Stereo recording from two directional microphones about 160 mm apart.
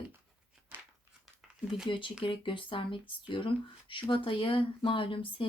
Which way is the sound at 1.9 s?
30° left (ahead or behind).